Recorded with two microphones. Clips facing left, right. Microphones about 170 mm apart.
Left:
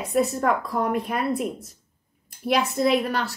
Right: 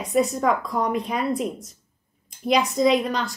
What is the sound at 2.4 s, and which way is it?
Speech, 20° right (ahead or behind).